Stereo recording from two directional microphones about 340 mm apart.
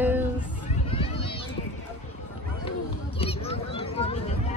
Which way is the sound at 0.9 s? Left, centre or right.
Centre.